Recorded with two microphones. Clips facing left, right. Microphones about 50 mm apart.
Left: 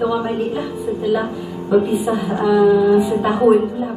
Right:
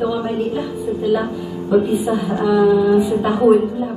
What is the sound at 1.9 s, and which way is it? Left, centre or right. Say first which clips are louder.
A woman's voice: even; centre.